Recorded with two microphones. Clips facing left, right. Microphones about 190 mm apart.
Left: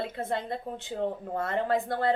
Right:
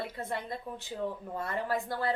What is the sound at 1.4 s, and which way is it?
Speech, 25° left (ahead or behind).